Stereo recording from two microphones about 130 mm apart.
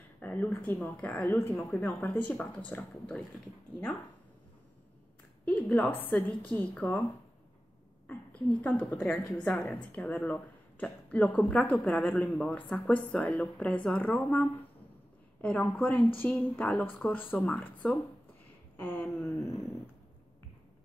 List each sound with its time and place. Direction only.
0.2 s a woman's voice: 15° left (ahead or behind)
5.4 s a woman's voice: 10° left (ahead or behind)
8.6 s a woman's voice: 5° left (ahead or behind)
18.8 s a woman's voice: 15° left (ahead or behind)